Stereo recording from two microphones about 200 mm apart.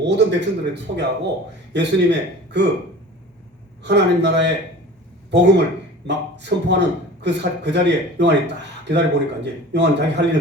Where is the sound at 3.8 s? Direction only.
60° right (ahead or behind).